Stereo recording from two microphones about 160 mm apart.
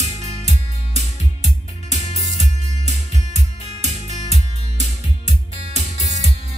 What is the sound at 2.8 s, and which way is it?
Music, 45° right (ahead or behind).